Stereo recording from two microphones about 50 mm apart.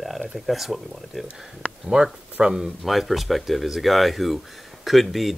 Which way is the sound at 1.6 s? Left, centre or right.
Centre.